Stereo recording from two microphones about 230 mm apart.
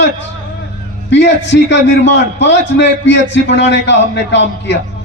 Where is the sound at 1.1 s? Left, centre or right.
Left.